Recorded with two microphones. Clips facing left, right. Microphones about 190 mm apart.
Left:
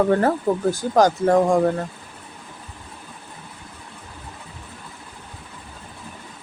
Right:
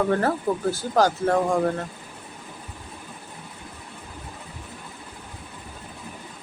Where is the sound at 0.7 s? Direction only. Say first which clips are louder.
Left 4 dB; 15° left (ahead or behind).